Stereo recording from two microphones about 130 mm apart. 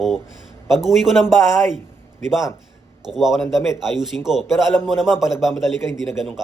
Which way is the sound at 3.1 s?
5° right (ahead or behind).